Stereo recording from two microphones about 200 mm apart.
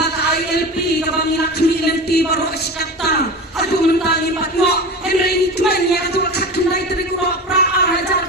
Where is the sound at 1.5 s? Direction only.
55° left (ahead or behind).